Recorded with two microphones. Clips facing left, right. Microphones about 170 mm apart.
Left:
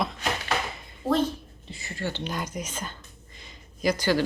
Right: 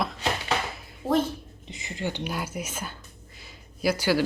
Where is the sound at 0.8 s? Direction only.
5° right (ahead or behind).